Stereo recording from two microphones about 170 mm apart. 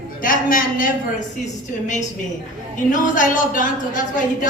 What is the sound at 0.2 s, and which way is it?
Speech, 50° left (ahead or behind).